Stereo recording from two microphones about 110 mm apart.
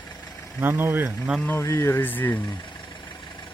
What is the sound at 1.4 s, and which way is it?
Speech, 25° left (ahead or behind).